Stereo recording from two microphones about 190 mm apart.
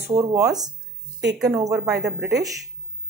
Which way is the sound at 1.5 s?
20° right (ahead or behind).